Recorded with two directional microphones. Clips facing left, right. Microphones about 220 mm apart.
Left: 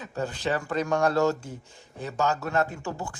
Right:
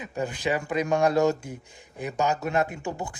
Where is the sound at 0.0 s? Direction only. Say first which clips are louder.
Right 1 dB; 15° right (ahead or behind).